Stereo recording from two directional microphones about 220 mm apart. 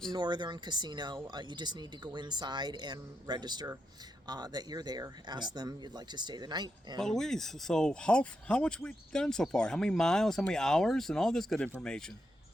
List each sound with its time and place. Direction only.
0.1 s speech: 20° right (ahead or behind)
7.0 s speech: centre (ahead or behind)